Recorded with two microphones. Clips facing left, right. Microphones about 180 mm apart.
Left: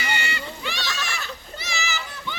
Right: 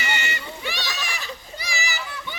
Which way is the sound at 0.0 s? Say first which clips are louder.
Even; 20° right (ahead or behind).